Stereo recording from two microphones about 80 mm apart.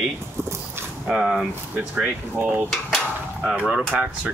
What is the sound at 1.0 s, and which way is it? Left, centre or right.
Speech, centre.